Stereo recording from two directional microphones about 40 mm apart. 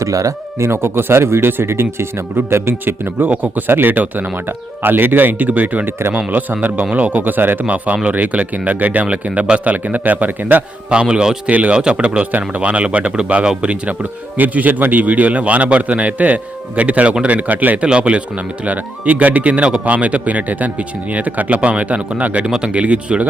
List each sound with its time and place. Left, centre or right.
0.7 s speech: right
3.2 s a man's voice: right
3.7 s speech: right
4.4 s speech: right
5.8 s speech: right
6.1 s speech: right
7.6 s a man's voice: right
11.1 s speech: right
11.4 s a man's voice: right
11.7 s a man's voice: right
14.3 s a man's voice: right
17.8 s a man's voice: right
22.4 s a man's voice: right